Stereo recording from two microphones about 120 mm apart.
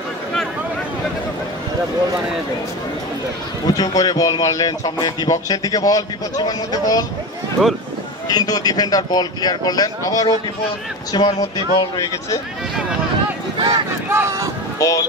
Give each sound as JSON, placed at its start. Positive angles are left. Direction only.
{"t": 3.6, "sound": "a man's voice", "side_deg": 35}
{"t": 8.3, "sound": "a man's voice", "side_deg": 35}
{"t": 13.6, "sound": "speech", "side_deg": -40}
{"t": 14.0, "sound": "speech", "side_deg": -20}
{"t": 14.8, "sound": "speech", "side_deg": 25}